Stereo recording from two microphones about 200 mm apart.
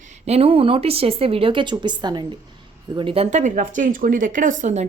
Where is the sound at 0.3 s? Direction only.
30° right (ahead or behind).